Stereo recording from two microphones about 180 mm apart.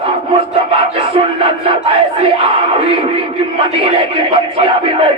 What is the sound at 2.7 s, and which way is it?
Speech, 30° right (ahead or behind).